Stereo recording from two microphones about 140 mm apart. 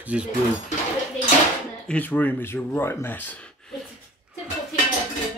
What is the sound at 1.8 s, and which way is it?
Speech, 10° left (ahead or behind).